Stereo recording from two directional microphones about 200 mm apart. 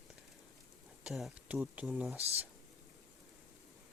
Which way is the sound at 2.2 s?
30° right (ahead or behind).